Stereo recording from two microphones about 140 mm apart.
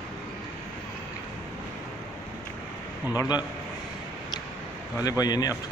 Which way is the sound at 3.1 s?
25° left (ahead or behind).